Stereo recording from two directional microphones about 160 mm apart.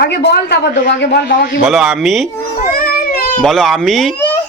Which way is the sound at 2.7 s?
65° left (ahead or behind).